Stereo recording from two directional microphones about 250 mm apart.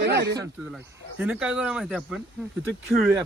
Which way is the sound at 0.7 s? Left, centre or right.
Centre.